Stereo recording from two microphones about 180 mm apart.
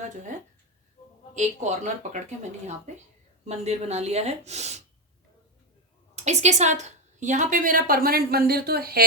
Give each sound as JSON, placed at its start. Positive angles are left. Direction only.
{"t": 1.4, "sound": "speech", "side_deg": -40}
{"t": 6.1, "sound": "a woman's voice", "side_deg": -40}